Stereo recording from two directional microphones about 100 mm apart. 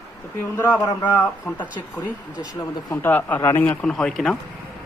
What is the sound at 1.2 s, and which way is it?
Speech, 15° left (ahead or behind).